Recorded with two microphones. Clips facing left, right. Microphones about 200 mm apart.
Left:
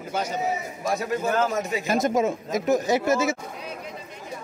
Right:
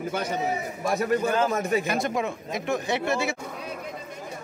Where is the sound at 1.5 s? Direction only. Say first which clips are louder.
Right 2 dB; 55° right (ahead or behind).